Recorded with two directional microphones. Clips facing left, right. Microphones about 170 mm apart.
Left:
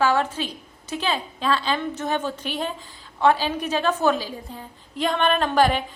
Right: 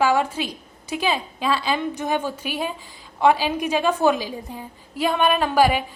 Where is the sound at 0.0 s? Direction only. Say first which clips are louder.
Right 1 dB; 10° right (ahead or behind).